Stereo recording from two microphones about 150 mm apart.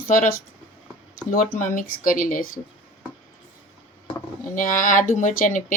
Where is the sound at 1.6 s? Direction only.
60° left (ahead or behind).